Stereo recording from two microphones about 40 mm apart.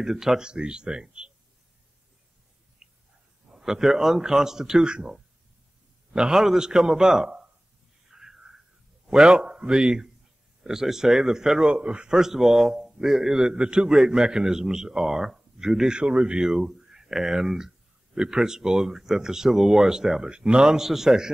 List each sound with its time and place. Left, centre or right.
0.0 s a man's voice: centre
0.5 s speech: right
2.8 s a sound: centre
3.4 s a man's voice: centre
6.3 s a man's voice: centre
8.1 s a sound: centre
9.1 s a man's voice: centre
11.7 s speech: right
12.1 s a man's voice: centre
15.9 s speech: right
20.3 s speech: right
20.6 s a man's voice: centre